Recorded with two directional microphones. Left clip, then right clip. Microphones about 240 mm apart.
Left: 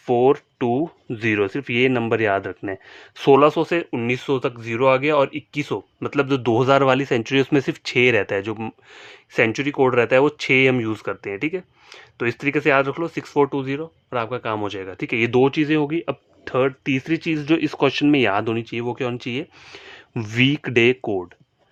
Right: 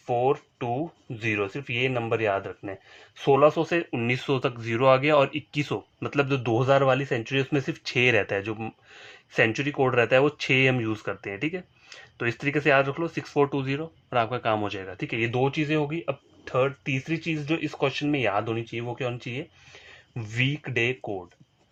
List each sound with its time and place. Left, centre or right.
0.0 s speech: left